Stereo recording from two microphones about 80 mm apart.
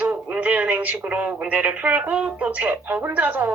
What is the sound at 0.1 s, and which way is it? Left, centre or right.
Speech, centre.